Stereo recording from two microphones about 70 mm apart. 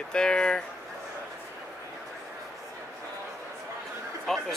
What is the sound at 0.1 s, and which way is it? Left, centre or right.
Speech, centre.